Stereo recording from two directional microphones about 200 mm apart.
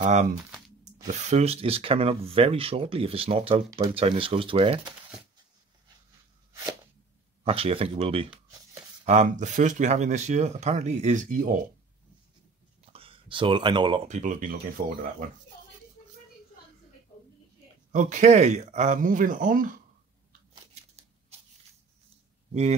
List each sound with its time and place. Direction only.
0.0 s speech: 35° right (ahead or behind)
7.4 s speech: 30° right (ahead or behind)
12.9 s speech: 25° right (ahead or behind)
14.0 s speech: 40° right (ahead or behind)
17.9 s speech: 35° right (ahead or behind)
22.5 s speech: 35° right (ahead or behind)